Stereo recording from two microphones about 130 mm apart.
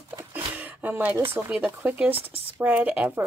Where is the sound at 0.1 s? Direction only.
15° right (ahead or behind).